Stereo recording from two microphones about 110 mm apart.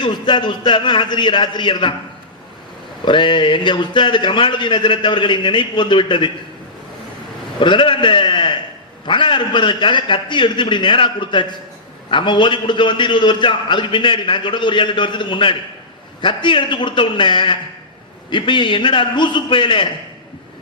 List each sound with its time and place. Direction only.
0.0 s a man's voice: 45° left (ahead or behind)
3.0 s a man's voice: 45° left (ahead or behind)
7.6 s a man's voice: 50° left (ahead or behind)